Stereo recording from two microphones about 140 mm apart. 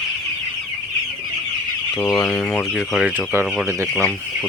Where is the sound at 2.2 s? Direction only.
15° left (ahead or behind).